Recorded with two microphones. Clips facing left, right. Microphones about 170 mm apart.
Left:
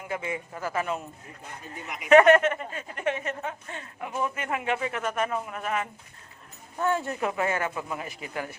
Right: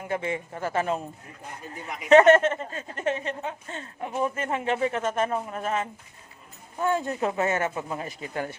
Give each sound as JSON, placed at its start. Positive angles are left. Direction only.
{"t": 0.1, "sound": "a woman's voice", "side_deg": -30}
{"t": 2.0, "sound": "a woman's voice", "side_deg": -25}
{"t": 6.7, "sound": "speech", "side_deg": -15}